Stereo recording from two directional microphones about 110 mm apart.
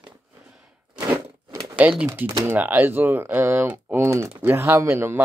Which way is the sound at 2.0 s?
25° right (ahead or behind).